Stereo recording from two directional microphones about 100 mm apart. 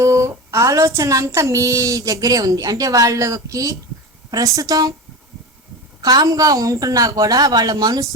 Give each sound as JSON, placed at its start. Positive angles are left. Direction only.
{"t": 0.0, "sound": "a child's voice", "side_deg": -30}
{"t": 6.0, "sound": "a child's voice", "side_deg": -40}